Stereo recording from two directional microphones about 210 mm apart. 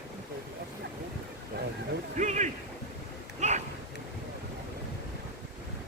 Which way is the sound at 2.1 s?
35° right (ahead or behind).